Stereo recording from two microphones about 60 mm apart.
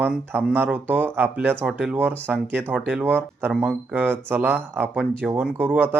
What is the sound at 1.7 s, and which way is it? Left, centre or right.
Speech, centre.